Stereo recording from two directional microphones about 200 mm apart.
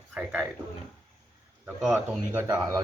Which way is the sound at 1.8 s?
5° right (ahead or behind).